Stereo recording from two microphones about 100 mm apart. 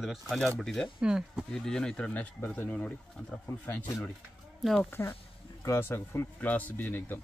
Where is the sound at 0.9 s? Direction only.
10° right (ahead or behind).